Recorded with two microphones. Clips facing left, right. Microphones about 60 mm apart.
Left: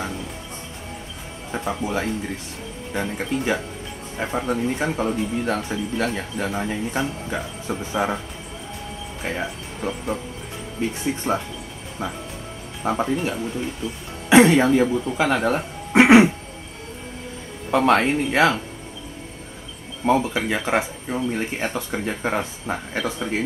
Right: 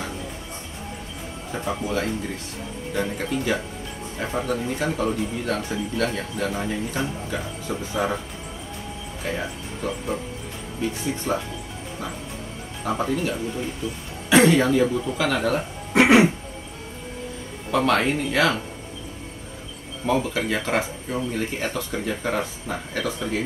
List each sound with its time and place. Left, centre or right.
1.5 s speech: centre
9.2 s speech: left
11.3 s speech: left
12.8 s speech: centre
14.3 s speech: left
17.6 s speech: left
20.1 s speech: left